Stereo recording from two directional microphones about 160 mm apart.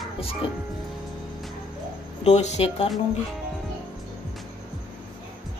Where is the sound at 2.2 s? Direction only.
45° left (ahead or behind).